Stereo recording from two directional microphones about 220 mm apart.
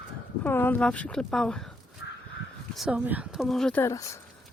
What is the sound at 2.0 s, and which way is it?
Crow, 60° left (ahead or behind).